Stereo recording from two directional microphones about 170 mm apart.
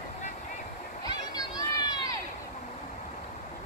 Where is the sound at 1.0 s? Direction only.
25° left (ahead or behind).